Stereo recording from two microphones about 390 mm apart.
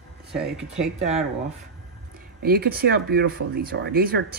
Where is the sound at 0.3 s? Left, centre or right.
Centre.